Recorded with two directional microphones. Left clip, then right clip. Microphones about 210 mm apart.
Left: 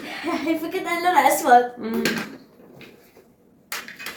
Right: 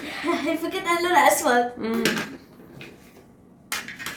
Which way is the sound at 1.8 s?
50° right (ahead or behind).